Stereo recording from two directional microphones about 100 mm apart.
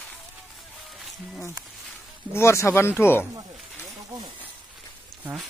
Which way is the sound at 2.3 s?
25° left (ahead or behind).